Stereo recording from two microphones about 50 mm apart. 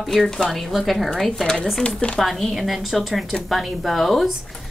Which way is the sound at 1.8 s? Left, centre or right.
Centre.